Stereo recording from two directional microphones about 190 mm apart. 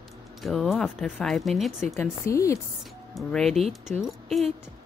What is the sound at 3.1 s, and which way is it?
Speech, centre (ahead or behind).